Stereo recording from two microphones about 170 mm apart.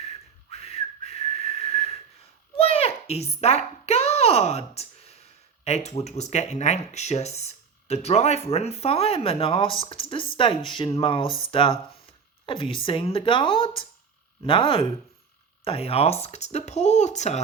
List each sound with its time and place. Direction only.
0.5 s whistling: 35° left (ahead or behind)
2.6 s a sound: 35° left (ahead or behind)
5.6 s speech: 40° left (ahead or behind)